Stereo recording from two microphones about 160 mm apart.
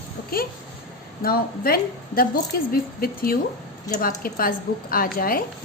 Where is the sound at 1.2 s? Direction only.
70° left (ahead or behind).